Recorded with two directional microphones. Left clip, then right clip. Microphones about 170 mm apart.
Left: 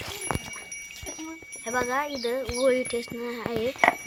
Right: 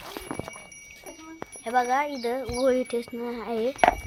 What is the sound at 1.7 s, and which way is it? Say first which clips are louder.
Speech: right 3 dB; 40° right (ahead or behind).